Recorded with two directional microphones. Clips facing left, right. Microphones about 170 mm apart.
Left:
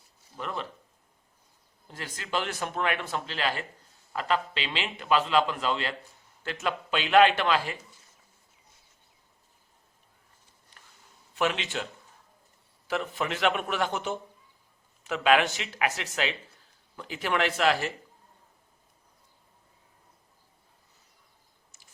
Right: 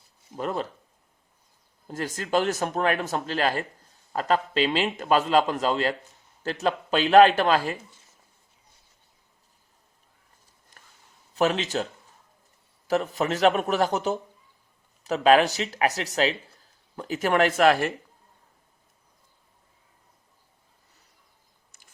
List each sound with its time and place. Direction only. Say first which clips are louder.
0.3 s a man's voice: right 6 dB; 40° right (ahead or behind)
1.9 s a man's voice: right 7 dB; 45° right (ahead or behind)
11.3 s a man's voice: right 5 dB; 40° right (ahead or behind)
12.9 s a man's voice: right 6 dB; 40° right (ahead or behind)